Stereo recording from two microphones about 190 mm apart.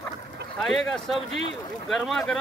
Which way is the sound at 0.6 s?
Centre (ahead or behind).